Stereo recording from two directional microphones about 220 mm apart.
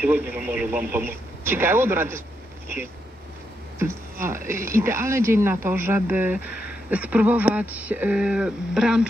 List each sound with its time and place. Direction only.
0.0 s speech: 10° right (ahead or behind)
3.8 s speech: 10° right (ahead or behind)